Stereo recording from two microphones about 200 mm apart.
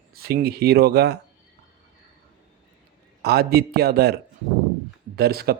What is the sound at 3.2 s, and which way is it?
Speech, 55° right (ahead or behind).